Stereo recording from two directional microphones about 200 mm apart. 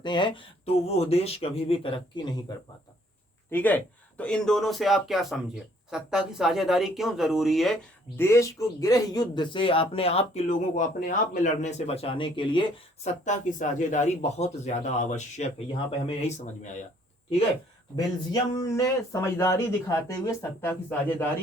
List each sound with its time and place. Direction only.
0.0 s speech: 25° left (ahead or behind)
3.5 s speech: 10° left (ahead or behind)
8.1 s speech: 15° left (ahead or behind)
13.2 s a man's voice: 40° left (ahead or behind)
17.9 s speech: 20° left (ahead or behind)